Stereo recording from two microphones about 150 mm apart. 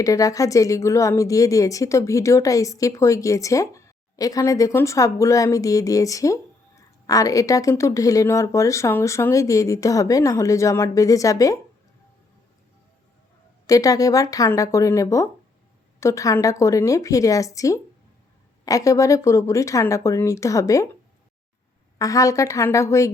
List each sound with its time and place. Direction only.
0.0 s a woman's voice: 20° left (ahead or behind)
13.7 s a woman's voice: 25° left (ahead or behind)
21.9 s a woman's voice: 20° left (ahead or behind)